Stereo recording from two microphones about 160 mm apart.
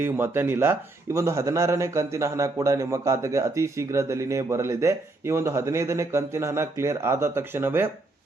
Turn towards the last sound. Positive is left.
turn(degrees=-15)  # may be behind; listen again after turning